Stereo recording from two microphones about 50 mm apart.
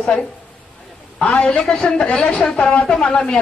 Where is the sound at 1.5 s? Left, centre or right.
Centre.